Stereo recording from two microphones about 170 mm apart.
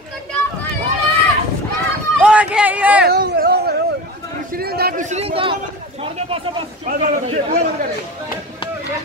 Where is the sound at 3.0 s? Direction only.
65° right (ahead or behind).